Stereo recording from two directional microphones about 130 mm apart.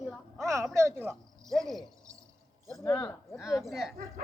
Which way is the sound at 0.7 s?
20° right (ahead or behind).